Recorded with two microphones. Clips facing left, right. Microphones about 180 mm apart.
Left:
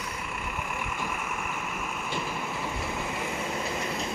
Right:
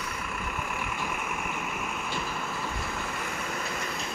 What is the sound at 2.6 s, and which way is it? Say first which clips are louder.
Vehicle: left 2 dB; 15° left (ahead or behind).